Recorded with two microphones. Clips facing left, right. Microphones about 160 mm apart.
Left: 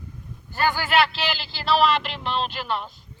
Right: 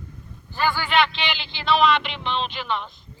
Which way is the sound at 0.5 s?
40° left (ahead or behind).